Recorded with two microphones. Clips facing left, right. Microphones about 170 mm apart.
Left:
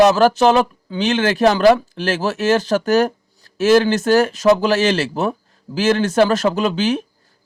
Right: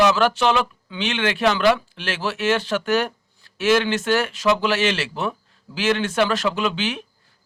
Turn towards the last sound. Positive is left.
turn(degrees=40)  # may be behind; listen again after turning